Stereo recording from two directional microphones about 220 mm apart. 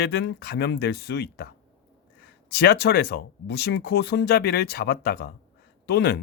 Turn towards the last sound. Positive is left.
turn(degrees=45)  # may be behind; listen again after turning